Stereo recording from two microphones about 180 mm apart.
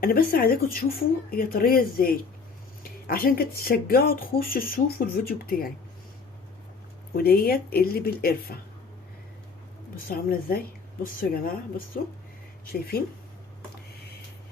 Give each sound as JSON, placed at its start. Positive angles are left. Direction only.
{"t": 0.0, "sound": "speech", "side_deg": 55}
{"t": 7.2, "sound": "speech", "side_deg": 60}
{"t": 9.9, "sound": "a woman's voice", "side_deg": 55}
{"t": 12.6, "sound": "speech", "side_deg": 55}